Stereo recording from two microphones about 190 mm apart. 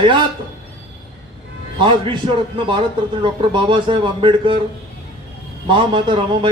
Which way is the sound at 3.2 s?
25° right (ahead or behind).